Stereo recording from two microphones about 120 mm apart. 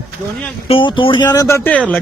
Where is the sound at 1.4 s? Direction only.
25° left (ahead or behind).